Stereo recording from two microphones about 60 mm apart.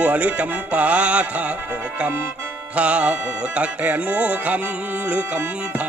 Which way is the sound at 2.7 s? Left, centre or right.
Right.